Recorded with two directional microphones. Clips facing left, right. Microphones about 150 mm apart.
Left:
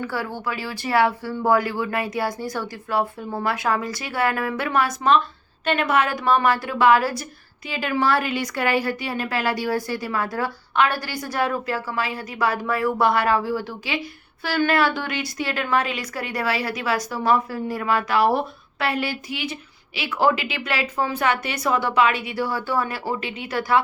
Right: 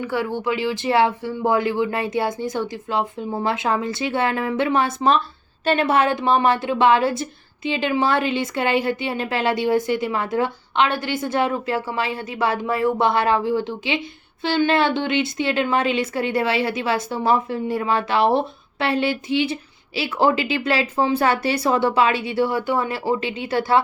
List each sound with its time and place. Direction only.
0.0 s a woman's voice: 20° right (ahead or behind)